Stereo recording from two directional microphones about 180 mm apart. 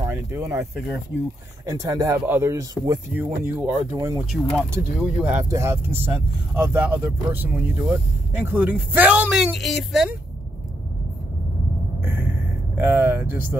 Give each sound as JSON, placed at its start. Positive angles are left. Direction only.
{"t": 0.0, "sound": "speech", "side_deg": -15}
{"t": 1.7, "sound": "speech", "side_deg": -20}
{"t": 4.3, "sound": "speech", "side_deg": -5}
{"t": 12.0, "sound": "a sound", "side_deg": -10}
{"t": 12.7, "sound": "speech", "side_deg": -10}